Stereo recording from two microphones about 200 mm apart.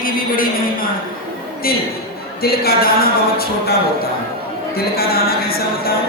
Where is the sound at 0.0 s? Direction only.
45° left (ahead or behind).